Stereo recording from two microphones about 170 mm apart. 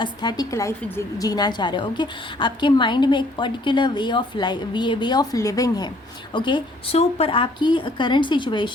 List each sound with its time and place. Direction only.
0.0 s a woman's voice: 25° left (ahead or behind)